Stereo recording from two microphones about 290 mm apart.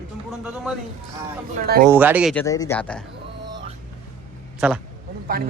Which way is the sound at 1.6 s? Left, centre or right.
Right.